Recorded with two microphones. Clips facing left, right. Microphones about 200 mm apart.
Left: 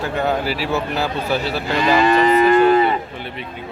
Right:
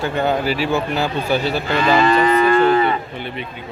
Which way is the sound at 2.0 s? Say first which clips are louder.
Left 3 dB; 20° left (ahead or behind).